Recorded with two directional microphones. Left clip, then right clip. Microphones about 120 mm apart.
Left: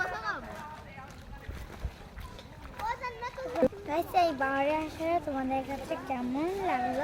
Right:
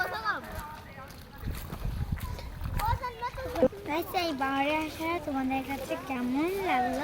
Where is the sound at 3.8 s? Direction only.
20° left (ahead or behind).